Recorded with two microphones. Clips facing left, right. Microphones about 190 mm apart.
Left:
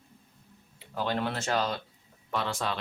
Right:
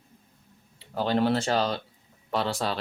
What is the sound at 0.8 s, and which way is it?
Speech, 35° right (ahead or behind).